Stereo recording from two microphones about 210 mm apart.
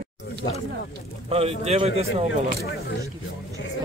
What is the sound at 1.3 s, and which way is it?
Speech, 30° right (ahead or behind).